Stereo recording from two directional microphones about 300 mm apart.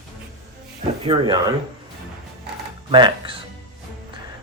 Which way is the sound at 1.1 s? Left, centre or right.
Centre.